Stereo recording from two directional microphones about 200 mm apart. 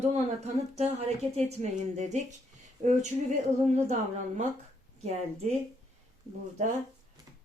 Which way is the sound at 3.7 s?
35° right (ahead or behind).